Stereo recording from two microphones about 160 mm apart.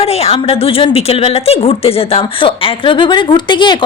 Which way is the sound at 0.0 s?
40° left (ahead or behind).